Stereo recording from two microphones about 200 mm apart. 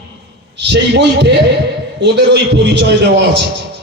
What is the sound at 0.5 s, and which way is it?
A man's voice, 60° right (ahead or behind).